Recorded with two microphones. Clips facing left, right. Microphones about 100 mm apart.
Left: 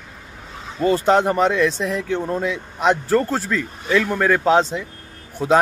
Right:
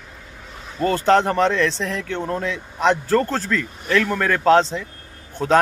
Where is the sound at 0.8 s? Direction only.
10° left (ahead or behind).